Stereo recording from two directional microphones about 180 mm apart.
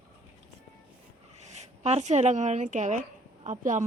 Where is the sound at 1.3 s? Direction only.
40° right (ahead or behind).